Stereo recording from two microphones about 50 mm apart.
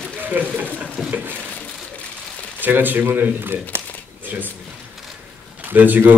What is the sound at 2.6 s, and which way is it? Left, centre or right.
A man's voice, right.